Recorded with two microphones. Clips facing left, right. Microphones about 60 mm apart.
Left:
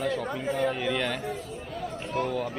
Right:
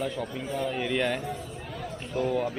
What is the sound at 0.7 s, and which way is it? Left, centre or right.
Speech, centre.